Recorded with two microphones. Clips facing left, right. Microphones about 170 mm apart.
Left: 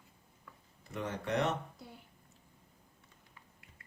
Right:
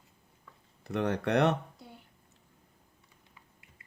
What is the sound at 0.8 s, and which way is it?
Speech, 70° right (ahead or behind).